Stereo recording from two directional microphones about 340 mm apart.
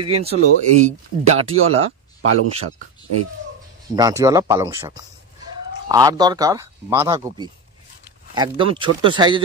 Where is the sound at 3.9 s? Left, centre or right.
Centre.